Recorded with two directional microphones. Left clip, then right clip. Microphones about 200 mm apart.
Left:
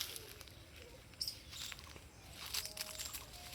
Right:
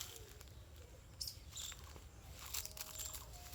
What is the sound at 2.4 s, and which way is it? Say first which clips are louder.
Crushing: left 5 dB; 10° right (ahead or behind).